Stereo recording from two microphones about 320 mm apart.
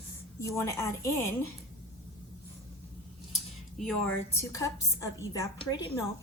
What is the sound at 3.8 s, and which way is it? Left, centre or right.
A woman's voice, centre.